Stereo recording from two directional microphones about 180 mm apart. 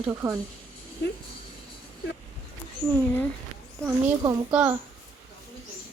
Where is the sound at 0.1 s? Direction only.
15° right (ahead or behind).